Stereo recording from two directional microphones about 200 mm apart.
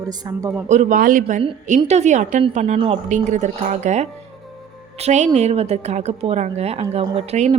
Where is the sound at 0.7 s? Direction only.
35° right (ahead or behind).